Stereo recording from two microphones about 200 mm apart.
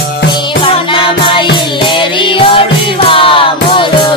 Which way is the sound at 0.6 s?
25° left (ahead or behind).